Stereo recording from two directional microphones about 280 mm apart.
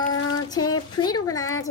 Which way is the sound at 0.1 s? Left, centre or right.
Left.